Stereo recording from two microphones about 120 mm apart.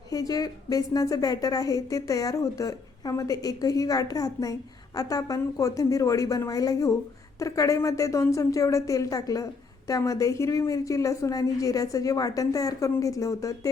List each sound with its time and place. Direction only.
0.1 s speech: 30° left (ahead or behind)